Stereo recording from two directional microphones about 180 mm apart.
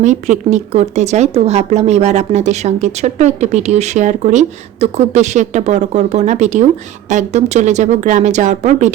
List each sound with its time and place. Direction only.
0.0 s speech: 40° right (ahead or behind)